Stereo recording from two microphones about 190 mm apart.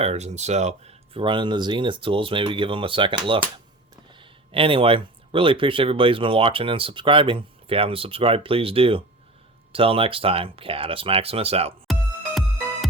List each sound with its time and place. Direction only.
0.0 s speech: 35° right (ahead or behind)
11.9 s music: centre (ahead or behind)